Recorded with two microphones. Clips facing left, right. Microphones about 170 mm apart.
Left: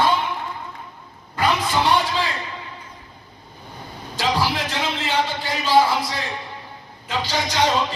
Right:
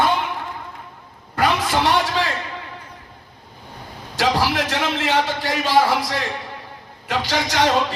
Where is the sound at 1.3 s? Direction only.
75° right (ahead or behind).